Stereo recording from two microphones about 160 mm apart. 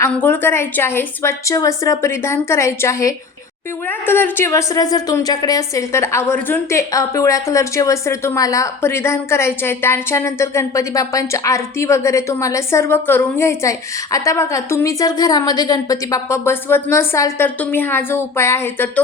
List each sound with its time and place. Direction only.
0.1 s a woman's voice: 10° left (ahead or behind)